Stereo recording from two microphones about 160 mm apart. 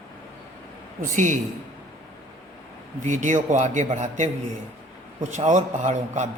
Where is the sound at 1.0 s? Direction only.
50° right (ahead or behind).